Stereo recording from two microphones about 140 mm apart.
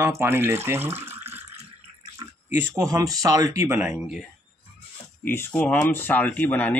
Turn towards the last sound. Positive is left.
turn(degrees=15)  # may be behind; listen again after turning